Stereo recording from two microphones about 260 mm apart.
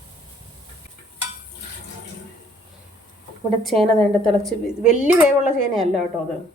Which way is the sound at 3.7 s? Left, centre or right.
Centre.